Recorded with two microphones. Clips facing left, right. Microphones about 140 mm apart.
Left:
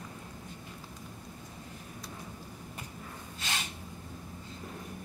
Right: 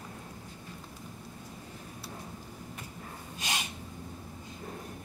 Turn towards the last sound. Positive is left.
turn(degrees=-15)  # may be behind; listen again after turning